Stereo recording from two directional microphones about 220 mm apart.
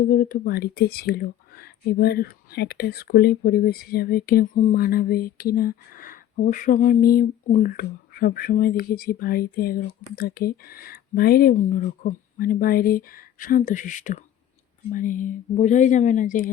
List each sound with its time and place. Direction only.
0.0 s speech: 40° left (ahead or behind)